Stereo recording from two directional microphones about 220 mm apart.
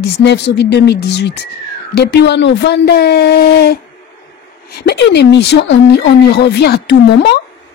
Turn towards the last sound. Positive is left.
turn(degrees=50)  # may be behind; listen again after turning